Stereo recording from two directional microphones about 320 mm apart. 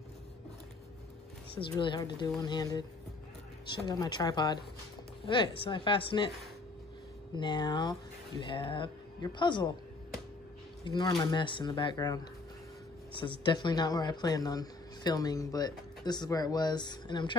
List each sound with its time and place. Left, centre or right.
1.5 s speech: centre
3.8 s speech: centre
7.3 s speech: centre
10.8 s speech: centre
13.2 s speech: centre